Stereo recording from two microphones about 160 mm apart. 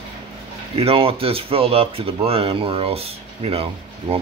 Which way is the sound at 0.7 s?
35° right (ahead or behind).